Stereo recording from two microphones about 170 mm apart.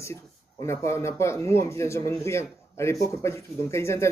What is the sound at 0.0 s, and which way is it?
Speech, 15° left (ahead or behind).